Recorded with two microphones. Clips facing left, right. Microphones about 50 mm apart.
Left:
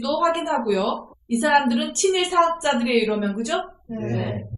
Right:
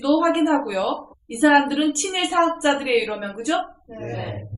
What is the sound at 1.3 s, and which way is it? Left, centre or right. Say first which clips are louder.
A woman's voice: right 2 dB; centre.